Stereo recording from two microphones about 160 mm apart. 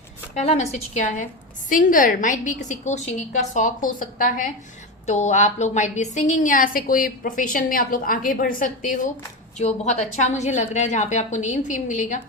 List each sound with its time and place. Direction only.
0.3 s a woman's voice: 45° left (ahead or behind)
9.6 s a woman's voice: 45° left (ahead or behind)